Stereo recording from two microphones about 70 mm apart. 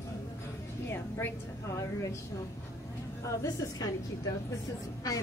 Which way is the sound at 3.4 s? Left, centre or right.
Left.